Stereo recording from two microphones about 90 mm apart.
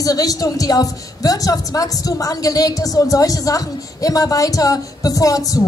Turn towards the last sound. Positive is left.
turn(degrees=40)  # may be behind; listen again after turning